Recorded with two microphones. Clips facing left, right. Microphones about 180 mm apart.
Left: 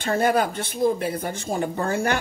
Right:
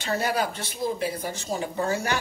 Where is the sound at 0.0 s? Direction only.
50° left (ahead or behind).